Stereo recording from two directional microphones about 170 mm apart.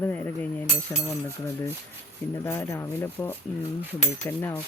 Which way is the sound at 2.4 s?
15° left (ahead or behind).